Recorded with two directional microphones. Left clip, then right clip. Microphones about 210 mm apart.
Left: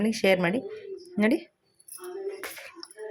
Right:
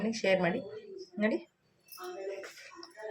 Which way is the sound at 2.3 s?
40° left (ahead or behind).